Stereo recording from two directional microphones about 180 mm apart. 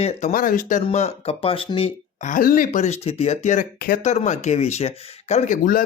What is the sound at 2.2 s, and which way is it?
Speech, 50° left (ahead or behind).